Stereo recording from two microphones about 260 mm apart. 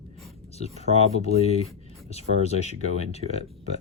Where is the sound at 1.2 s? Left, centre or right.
Left.